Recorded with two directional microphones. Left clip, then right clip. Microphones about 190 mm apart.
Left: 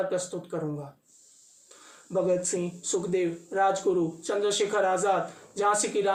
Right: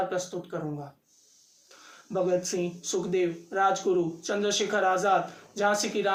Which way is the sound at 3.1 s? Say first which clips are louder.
Right 2 dB; 15° right (ahead or behind).